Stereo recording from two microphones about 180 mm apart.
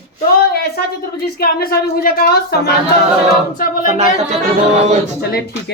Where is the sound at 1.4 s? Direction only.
60° left (ahead or behind).